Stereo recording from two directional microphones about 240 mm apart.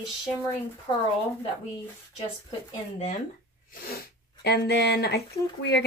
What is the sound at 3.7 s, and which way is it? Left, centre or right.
Speech, left.